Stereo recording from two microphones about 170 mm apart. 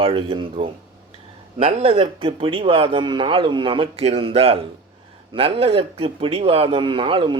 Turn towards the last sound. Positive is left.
turn(degrees=-30)  # may be behind; listen again after turning